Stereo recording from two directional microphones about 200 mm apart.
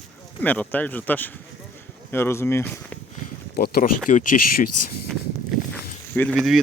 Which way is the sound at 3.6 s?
50° left (ahead or behind).